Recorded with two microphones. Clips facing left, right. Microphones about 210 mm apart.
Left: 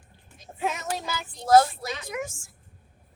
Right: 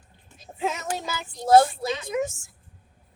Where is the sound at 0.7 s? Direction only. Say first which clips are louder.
Right 1 dB; 20° right (ahead or behind).